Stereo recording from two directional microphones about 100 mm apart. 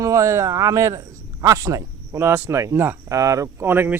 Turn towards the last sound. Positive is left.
turn(degrees=-20)  # may be behind; listen again after turning